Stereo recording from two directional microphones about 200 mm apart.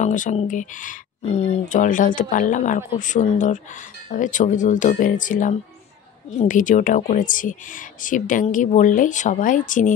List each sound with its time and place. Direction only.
0.0 s a woman's voice: 40° left (ahead or behind)